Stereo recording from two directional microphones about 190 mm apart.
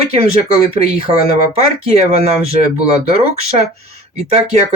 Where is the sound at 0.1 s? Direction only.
35° right (ahead or behind).